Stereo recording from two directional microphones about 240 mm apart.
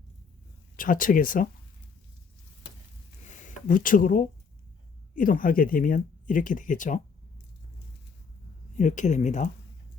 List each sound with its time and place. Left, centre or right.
0.8 s speech: left
3.2 s a sound: left
5.1 s speech: left
8.8 s speech: left